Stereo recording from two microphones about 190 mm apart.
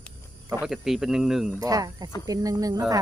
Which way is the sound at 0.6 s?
Centre (ahead or behind).